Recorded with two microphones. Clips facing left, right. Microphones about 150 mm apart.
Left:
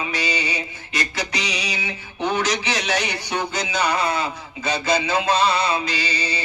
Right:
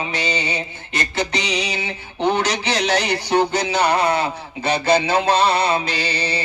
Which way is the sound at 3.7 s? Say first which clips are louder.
Right 3 dB; 60° right (ahead or behind).